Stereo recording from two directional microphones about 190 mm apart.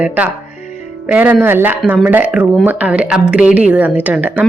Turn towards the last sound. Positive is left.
turn(degrees=-10)  # may be behind; listen again after turning